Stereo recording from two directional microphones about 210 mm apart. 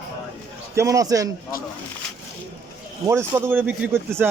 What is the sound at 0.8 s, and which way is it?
Speech, 15° right (ahead or behind).